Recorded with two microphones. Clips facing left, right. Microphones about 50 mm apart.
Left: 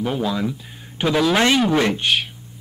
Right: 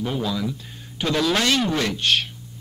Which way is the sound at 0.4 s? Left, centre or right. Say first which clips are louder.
Left 3 dB; left.